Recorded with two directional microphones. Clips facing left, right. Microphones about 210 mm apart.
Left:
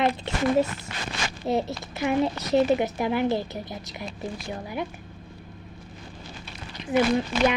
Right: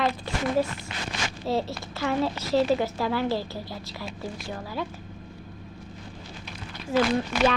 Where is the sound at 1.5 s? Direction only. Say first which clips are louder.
Left 2 dB; 20° left (ahead or behind).